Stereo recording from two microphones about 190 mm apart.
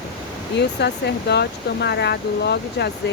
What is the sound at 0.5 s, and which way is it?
Speech, 60° left (ahead or behind).